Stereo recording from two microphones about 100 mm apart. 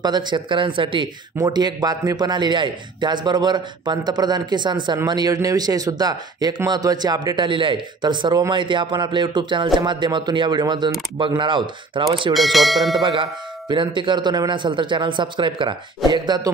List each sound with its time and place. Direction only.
0.0 s speech: 45° right (ahead or behind)
1.4 s speech: 45° right (ahead or behind)
12.4 s speech: centre (ahead or behind)
13.0 s speech: 50° right (ahead or behind)